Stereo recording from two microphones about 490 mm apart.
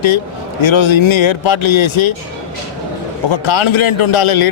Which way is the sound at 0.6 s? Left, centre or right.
Left.